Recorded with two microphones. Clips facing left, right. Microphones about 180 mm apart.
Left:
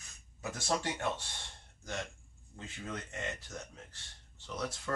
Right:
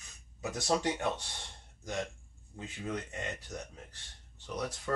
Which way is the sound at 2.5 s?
15° right (ahead or behind).